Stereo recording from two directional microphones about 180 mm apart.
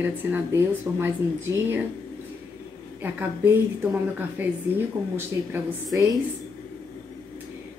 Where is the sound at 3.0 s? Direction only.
10° right (ahead or behind).